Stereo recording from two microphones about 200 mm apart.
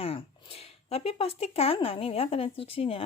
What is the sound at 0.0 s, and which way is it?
Speech, 30° left (ahead or behind).